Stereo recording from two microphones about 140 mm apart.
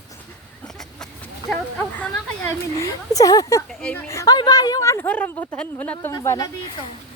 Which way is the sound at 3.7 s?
5° left (ahead or behind).